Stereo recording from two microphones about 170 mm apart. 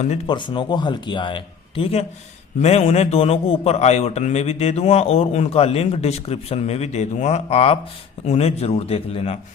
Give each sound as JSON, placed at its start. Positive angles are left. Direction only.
{"t": 0.3, "sound": "a man's voice", "side_deg": 25}